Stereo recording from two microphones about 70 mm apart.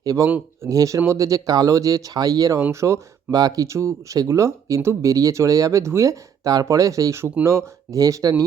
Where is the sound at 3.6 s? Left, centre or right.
Right.